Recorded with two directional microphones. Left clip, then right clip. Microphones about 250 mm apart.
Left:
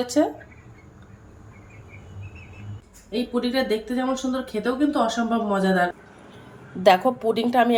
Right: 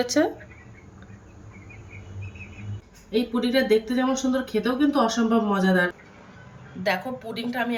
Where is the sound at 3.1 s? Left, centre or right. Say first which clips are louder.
Right 1 dB; centre.